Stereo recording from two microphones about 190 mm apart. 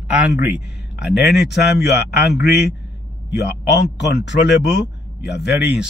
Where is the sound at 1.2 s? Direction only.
60° left (ahead or behind).